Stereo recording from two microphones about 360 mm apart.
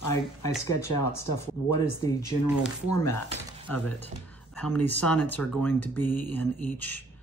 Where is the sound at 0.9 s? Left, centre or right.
Left.